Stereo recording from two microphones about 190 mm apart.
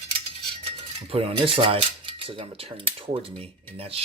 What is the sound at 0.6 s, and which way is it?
Speech, 30° right (ahead or behind).